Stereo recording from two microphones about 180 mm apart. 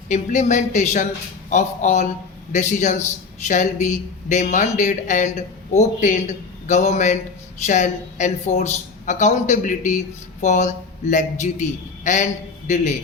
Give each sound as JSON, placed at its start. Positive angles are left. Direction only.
{"t": 0.1, "sound": "a woman's voice", "side_deg": 40}